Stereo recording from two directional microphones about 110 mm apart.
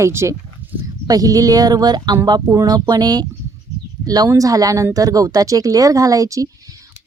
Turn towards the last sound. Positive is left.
turn(degrees=-30)  # may be behind; listen again after turning